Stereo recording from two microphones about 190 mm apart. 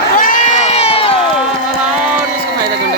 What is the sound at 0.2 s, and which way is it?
Crowd, 45° left (ahead or behind).